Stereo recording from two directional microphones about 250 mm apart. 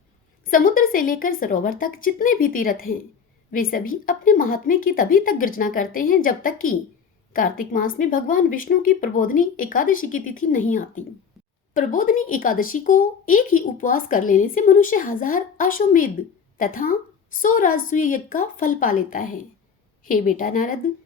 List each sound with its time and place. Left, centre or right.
0.4 s speech: left